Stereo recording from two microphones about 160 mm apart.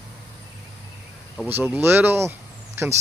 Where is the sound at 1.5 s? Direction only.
15° right (ahead or behind).